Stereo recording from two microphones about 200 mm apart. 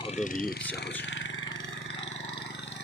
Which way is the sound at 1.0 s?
65° left (ahead or behind).